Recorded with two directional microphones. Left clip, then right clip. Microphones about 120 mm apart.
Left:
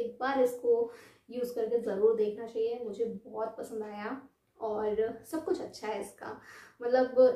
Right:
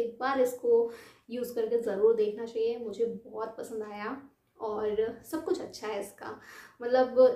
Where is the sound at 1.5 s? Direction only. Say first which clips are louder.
Right 2 dB; 20° right (ahead or behind).